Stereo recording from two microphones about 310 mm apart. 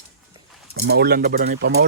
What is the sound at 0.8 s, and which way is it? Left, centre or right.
Speech, right.